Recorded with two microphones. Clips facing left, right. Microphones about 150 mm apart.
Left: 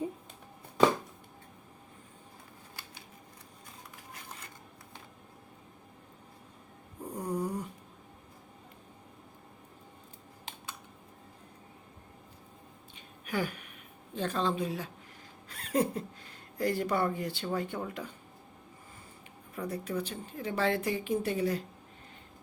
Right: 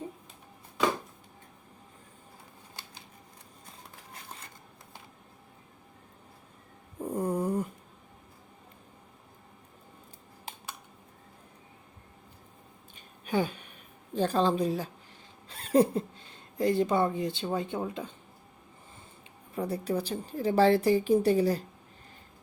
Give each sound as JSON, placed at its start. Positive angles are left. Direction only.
{"t": 7.1, "sound": "snoring", "side_deg": -50}
{"t": 13.2, "sound": "speech", "side_deg": -25}
{"t": 19.5, "sound": "speech", "side_deg": -30}